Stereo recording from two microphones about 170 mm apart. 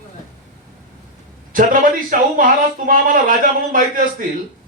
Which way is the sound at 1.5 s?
55° right (ahead or behind).